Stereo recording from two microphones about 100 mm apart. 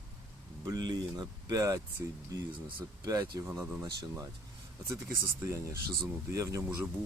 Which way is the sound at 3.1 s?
35° right (ahead or behind).